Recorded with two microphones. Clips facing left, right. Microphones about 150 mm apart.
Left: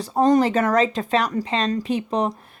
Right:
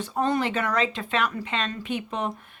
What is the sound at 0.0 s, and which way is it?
Speech, 35° left (ahead or behind).